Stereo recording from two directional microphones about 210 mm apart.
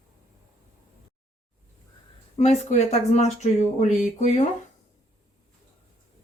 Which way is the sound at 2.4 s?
30° left (ahead or behind).